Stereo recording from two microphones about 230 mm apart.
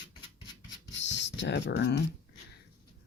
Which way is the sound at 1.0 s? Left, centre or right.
Left.